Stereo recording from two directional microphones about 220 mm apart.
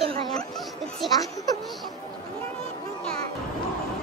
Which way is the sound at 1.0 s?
Centre (ahead or behind).